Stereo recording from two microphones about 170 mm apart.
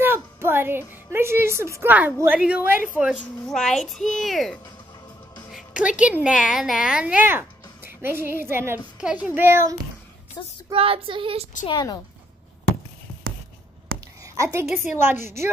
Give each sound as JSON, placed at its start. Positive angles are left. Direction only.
{"t": 0.0, "sound": "a woman's voice", "side_deg": -15}
{"t": 3.4, "sound": "a woman's voice", "side_deg": 5}
{"t": 5.5, "sound": "music", "side_deg": -5}
{"t": 6.5, "sound": "a child's voice", "side_deg": -5}
{"t": 10.4, "sound": "a woman's voice", "side_deg": 25}
{"t": 10.7, "sound": "child singing", "side_deg": -35}
{"t": 11.6, "sound": "a woman's voice", "side_deg": 25}
{"t": 14.2, "sound": "a sound", "side_deg": -15}
{"t": 15.2, "sound": "a child's voice", "side_deg": -15}